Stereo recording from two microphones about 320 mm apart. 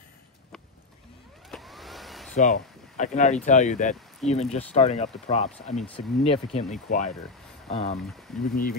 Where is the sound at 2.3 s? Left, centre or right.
Left.